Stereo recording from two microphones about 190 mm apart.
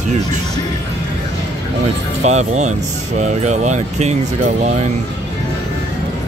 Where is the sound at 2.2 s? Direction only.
35° right (ahead or behind).